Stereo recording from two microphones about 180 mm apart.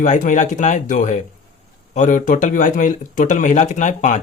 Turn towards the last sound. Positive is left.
turn(degrees=45)  # may be behind; listen again after turning